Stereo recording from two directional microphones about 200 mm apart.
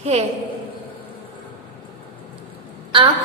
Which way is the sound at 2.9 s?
25° right (ahead or behind).